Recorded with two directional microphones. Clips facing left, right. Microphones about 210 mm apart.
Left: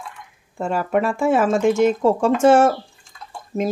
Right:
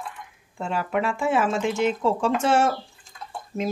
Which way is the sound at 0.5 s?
45° left (ahead or behind).